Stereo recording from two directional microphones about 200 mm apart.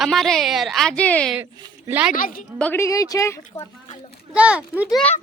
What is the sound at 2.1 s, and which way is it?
Speech, 45° left (ahead or behind).